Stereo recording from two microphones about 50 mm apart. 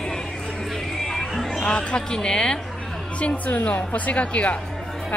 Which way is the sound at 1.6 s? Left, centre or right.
Centre.